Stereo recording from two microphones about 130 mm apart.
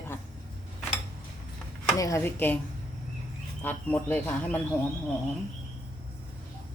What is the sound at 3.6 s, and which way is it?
Speech, 15° left (ahead or behind).